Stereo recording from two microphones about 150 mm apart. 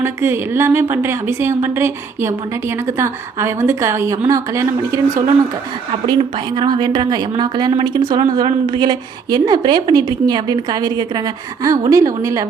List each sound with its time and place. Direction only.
0.0 s a woman's voice: 15° right (ahead or behind)
6.1 s a woman's voice: 35° right (ahead or behind)